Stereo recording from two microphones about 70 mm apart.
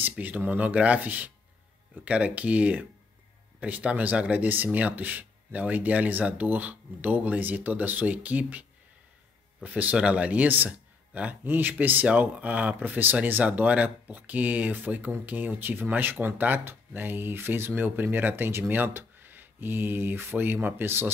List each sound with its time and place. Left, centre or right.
0.2 s speech: right